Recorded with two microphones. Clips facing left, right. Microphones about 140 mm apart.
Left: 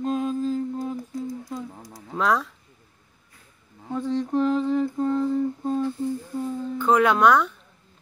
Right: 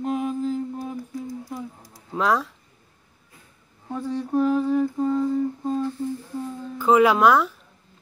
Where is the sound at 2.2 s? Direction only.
Centre (ahead or behind).